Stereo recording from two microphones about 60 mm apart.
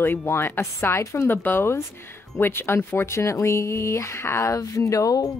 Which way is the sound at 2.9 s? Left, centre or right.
Left.